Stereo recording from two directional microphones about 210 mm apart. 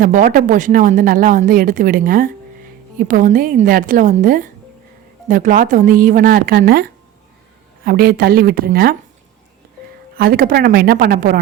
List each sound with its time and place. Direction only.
0.0 s a woman's voice: 40° right (ahead or behind)
10.2 s a woman's voice: 45° right (ahead or behind)